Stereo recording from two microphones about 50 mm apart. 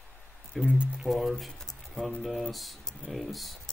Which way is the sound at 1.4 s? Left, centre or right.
Centre.